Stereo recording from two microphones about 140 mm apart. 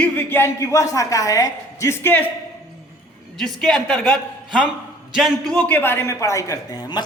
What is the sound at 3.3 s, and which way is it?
A woman's voice, centre (ahead or behind).